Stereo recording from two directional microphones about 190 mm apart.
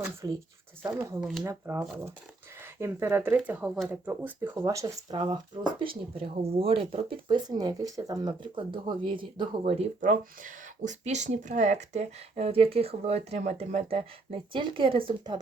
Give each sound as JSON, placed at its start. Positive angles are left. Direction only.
{"t": 0.2, "sound": "speech", "side_deg": -15}
{"t": 1.2, "sound": "speech", "side_deg": 0}
{"t": 1.5, "sound": "speech", "side_deg": -15}
{"t": 2.8, "sound": "speech", "side_deg": -10}